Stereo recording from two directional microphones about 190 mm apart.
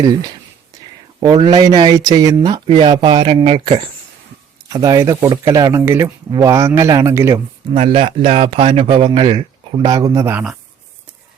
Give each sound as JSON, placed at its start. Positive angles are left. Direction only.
{"t": 0.0, "sound": "speech", "side_deg": -20}
{"t": 4.7, "sound": "speech", "side_deg": -15}
{"t": 7.7, "sound": "speech", "side_deg": -30}